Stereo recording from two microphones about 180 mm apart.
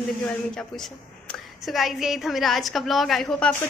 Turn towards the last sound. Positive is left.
turn(degrees=5)  # may be behind; listen again after turning